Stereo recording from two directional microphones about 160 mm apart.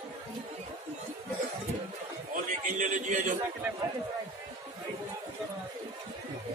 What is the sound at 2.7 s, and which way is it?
Speech, 50° right (ahead or behind).